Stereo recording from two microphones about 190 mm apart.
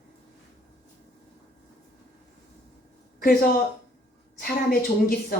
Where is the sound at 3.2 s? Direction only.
50° left (ahead or behind).